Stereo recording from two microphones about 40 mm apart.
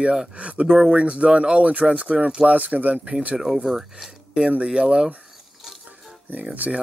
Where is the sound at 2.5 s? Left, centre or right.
Right.